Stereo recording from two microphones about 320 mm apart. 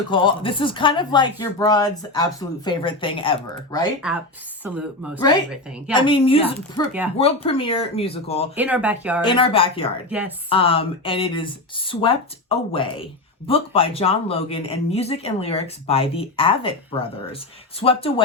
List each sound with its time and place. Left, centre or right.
0.1 s speech: centre
4.6 s speech: centre
5.9 s speech: centre
8.5 s speech: centre
9.2 s speech: centre
10.1 s speech: centre
10.5 s speech: centre